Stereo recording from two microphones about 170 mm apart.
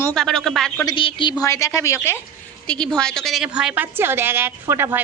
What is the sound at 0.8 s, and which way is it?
Speech, 30° left (ahead or behind).